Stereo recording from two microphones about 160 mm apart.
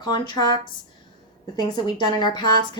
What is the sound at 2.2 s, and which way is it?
Speech, 25° left (ahead or behind).